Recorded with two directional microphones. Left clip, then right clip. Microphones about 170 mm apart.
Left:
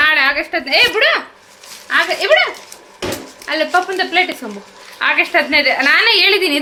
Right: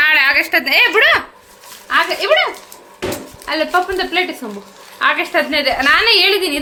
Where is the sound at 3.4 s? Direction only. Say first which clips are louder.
Left 1 dB; 10° right (ahead or behind).